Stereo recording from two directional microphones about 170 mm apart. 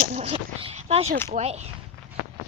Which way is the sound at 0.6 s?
35° right (ahead or behind).